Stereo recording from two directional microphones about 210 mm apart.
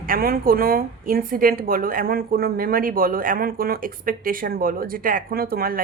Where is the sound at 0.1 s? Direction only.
45° right (ahead or behind).